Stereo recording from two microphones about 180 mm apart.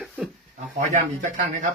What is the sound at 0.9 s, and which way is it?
Speech, 40° right (ahead or behind).